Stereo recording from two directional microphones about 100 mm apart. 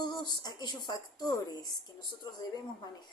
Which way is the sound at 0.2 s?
45° left (ahead or behind).